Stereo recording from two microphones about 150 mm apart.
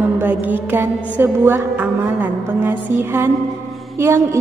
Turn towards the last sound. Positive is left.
turn(degrees=-15)  # may be behind; listen again after turning